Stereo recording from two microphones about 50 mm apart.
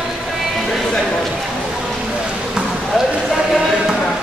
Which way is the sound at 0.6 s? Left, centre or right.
Centre.